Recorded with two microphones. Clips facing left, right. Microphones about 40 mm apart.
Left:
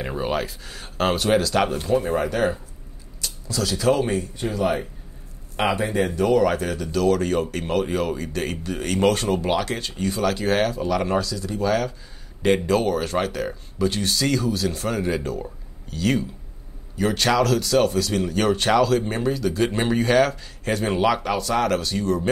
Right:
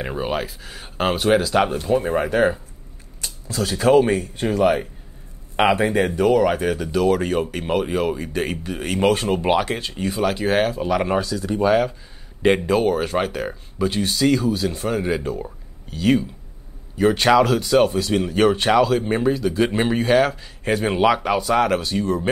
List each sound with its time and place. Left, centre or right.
0.0 s speech: centre; by 6.1 s right
6.3 s speech: centre